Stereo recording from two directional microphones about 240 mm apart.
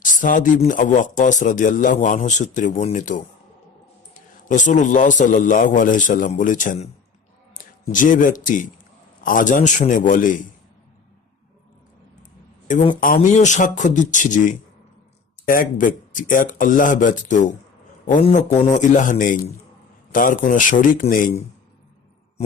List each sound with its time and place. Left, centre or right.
0.0 s a man's voice: left
7.9 s a man's voice: left
12.6 s a man's voice: left